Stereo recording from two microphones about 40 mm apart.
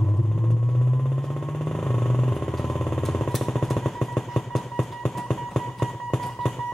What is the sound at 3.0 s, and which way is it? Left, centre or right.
Music, centre.